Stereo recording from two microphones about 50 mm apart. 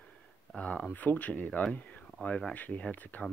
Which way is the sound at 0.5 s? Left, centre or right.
Left.